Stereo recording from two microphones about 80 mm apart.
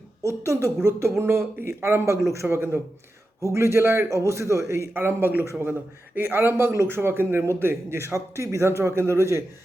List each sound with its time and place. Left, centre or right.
0.4 s a man's voice: right
4.9 s a man's voice: right